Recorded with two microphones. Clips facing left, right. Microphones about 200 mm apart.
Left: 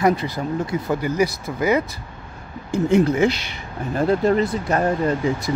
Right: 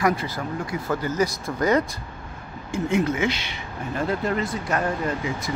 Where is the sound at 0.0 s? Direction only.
25° left (ahead or behind).